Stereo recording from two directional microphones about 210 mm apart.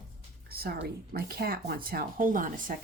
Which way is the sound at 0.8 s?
50° right (ahead or behind).